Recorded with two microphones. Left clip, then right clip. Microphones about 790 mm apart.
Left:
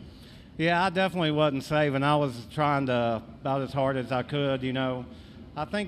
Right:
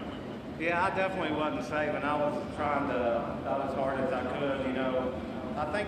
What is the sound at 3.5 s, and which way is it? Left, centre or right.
Speech, left.